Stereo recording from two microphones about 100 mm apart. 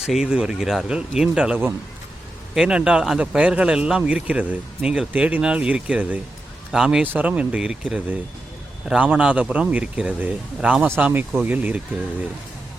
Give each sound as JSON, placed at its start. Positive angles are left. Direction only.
{"t": 0.0, "sound": "speech", "side_deg": -5}
{"t": 2.6, "sound": "a man's voice", "side_deg": -10}